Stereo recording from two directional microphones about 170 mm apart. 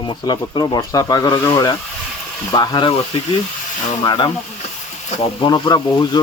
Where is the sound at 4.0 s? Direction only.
25° left (ahead or behind).